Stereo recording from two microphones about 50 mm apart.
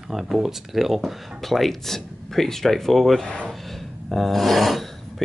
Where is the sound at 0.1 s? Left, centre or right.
Centre.